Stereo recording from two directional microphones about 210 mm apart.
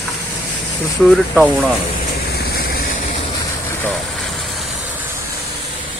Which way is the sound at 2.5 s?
45° left (ahead or behind).